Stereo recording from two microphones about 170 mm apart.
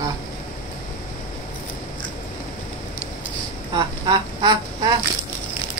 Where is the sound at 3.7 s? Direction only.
25° right (ahead or behind).